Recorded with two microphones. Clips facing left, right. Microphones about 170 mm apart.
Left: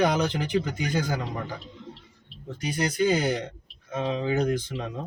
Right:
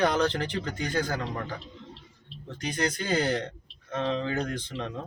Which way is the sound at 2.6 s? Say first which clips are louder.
Left 5 dB; 10° left (ahead or behind).